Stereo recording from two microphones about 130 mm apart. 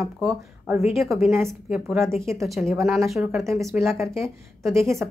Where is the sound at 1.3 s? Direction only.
15° right (ahead or behind).